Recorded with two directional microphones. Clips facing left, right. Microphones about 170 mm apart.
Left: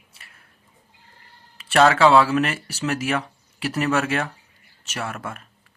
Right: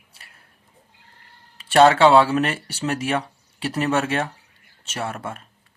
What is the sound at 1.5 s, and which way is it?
Speech, 30° right (ahead or behind).